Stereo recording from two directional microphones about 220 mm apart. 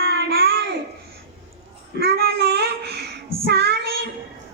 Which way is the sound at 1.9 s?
45° right (ahead or behind).